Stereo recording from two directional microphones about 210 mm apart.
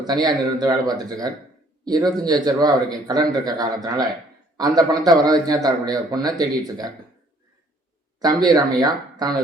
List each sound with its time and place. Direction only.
0.0 s a man's voice: 20° right (ahead or behind)
8.2 s a man's voice: 20° right (ahead or behind)